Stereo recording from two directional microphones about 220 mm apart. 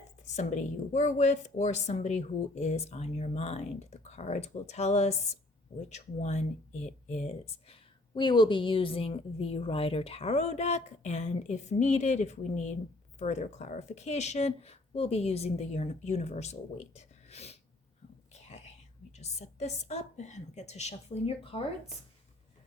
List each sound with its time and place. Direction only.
0.3 s a woman's voice: 35° left (ahead or behind)
18.3 s whispering: 30° left (ahead or behind)
19.1 s a woman's voice: 30° left (ahead or behind)